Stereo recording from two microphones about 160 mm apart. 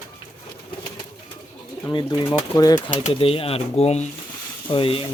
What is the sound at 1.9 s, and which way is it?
Speech, 30° left (ahead or behind).